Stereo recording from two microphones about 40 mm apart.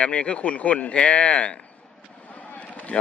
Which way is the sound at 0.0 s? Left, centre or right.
Left.